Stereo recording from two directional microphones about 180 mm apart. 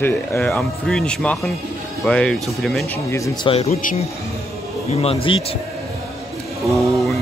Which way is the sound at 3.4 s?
35° left (ahead or behind).